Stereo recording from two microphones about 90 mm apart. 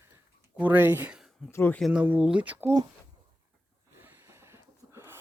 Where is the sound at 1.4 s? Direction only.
30° left (ahead or behind).